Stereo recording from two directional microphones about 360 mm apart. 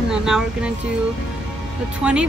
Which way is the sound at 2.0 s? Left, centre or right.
Centre.